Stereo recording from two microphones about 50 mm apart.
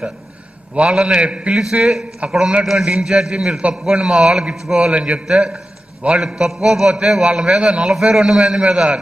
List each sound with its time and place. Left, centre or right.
0.7 s a man's voice: centre
1.6 s a man's voice: centre
2.6 s a man's voice: centre